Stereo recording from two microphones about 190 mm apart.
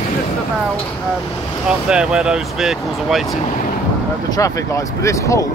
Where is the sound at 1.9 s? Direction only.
5° right (ahead or behind).